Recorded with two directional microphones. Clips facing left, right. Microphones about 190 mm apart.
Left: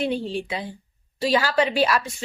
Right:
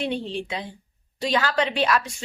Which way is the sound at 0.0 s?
5° left (ahead or behind).